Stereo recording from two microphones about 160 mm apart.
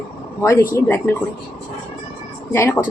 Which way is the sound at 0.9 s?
15° left (ahead or behind).